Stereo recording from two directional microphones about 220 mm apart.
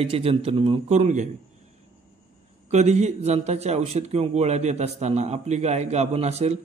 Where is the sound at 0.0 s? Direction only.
25° right (ahead or behind).